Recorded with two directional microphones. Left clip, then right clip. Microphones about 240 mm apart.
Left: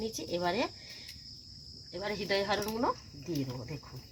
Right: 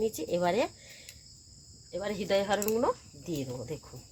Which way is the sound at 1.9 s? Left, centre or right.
Right.